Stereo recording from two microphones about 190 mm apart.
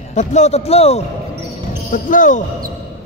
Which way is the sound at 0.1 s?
35° left (ahead or behind).